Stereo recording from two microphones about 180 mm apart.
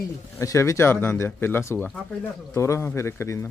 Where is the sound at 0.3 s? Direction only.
15° left (ahead or behind).